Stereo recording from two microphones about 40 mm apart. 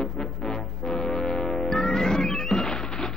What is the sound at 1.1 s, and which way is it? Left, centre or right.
Music, centre.